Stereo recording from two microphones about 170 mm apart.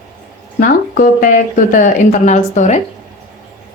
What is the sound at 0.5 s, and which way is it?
Speech, 55° left (ahead or behind).